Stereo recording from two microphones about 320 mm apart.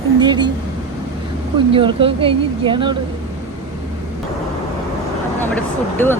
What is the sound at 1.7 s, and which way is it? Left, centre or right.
Speech, centre.